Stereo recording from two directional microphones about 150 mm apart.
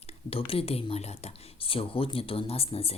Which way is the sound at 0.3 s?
40° left (ahead or behind).